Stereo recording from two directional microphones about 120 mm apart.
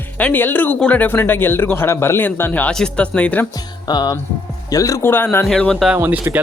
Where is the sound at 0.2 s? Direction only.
15° left (ahead or behind).